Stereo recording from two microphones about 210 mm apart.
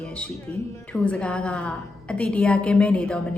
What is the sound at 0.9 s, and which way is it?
A woman's voice, 5° left (ahead or behind).